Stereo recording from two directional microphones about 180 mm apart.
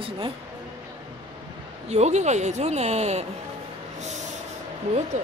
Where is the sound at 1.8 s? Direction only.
40° right (ahead or behind).